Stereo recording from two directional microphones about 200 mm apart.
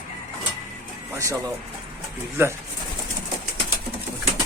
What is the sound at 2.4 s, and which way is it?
Speech, 10° right (ahead or behind).